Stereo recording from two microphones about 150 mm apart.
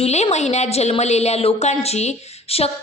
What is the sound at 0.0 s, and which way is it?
A woman's voice, 45° left (ahead or behind).